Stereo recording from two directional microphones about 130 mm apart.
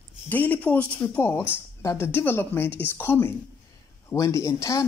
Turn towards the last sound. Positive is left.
turn(degrees=25)  # may be behind; listen again after turning